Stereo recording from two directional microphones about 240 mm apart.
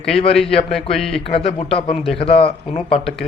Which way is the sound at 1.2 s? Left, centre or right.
Left.